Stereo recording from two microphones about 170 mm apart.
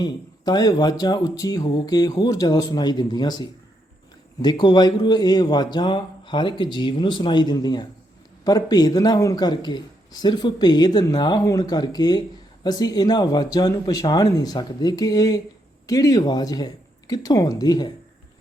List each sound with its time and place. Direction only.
0.0 s a man's voice: 25° left (ahead or behind)